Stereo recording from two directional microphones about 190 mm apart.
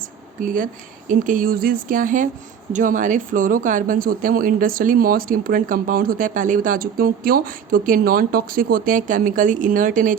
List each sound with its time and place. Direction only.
0.4 s speech: 45° right (ahead or behind)